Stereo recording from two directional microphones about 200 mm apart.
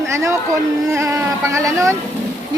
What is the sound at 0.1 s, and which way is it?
Speech, 15° right (ahead or behind).